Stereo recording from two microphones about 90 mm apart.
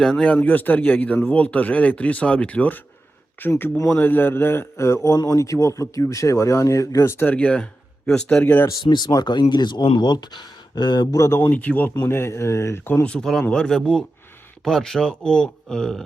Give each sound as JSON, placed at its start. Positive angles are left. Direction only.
{"t": 0.0, "sound": "a man's voice", "side_deg": 10}
{"t": 5.0, "sound": "speech", "side_deg": 40}
{"t": 7.3, "sound": "speech", "side_deg": 15}
{"t": 8.8, "sound": "speech", "side_deg": 60}
{"t": 11.3, "sound": "a man's voice", "side_deg": 20}